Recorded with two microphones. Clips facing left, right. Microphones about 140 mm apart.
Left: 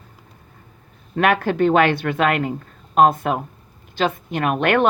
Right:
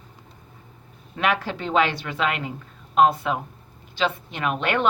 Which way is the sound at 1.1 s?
50° left (ahead or behind).